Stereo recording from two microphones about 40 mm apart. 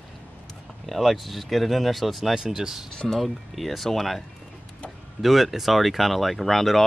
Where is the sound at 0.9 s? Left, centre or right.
Centre.